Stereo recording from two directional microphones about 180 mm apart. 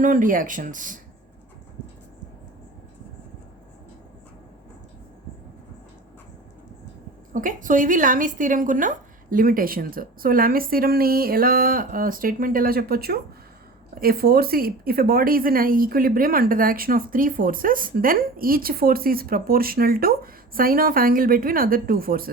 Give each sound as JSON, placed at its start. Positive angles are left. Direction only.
{"t": 0.0, "sound": "a woman's voice", "side_deg": -50}
{"t": 7.3, "sound": "a woman's voice", "side_deg": -50}